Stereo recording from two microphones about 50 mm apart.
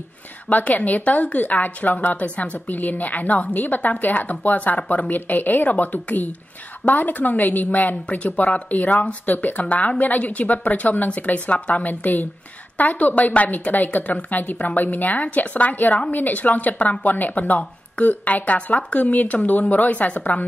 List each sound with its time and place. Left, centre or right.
0.5 s a woman's voice: left